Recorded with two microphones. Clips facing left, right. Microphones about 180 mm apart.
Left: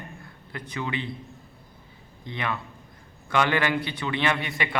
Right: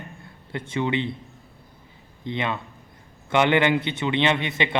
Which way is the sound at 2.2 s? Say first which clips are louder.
Right 4 dB; 25° right (ahead or behind).